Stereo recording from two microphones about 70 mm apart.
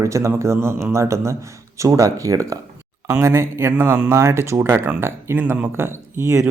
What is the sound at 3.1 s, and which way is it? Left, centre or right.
Speech, right.